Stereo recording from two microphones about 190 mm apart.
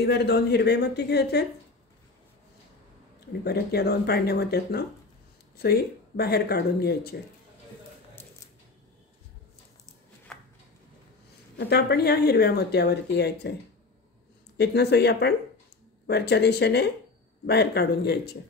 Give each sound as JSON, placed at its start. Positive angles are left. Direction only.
{"t": 0.0, "sound": "speech", "side_deg": 60}
{"t": 3.4, "sound": "speech", "side_deg": 55}
{"t": 11.5, "sound": "speech", "side_deg": 60}
{"t": 14.6, "sound": "speech", "side_deg": 60}